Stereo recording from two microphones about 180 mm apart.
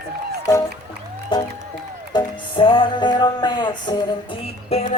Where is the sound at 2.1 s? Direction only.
30° left (ahead or behind).